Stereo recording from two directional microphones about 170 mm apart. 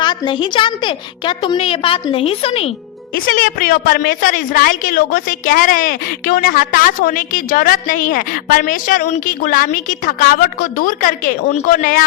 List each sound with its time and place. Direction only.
0.0 s a woman's voice: 25° left (ahead or behind)
3.2 s a woman's voice: 60° left (ahead or behind)